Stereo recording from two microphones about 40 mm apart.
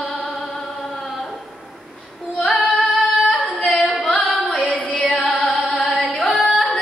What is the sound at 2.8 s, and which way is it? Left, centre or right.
Singing, left.